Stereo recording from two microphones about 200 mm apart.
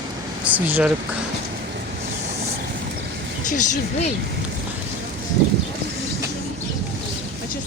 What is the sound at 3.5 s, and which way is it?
Speech, 40° left (ahead or behind).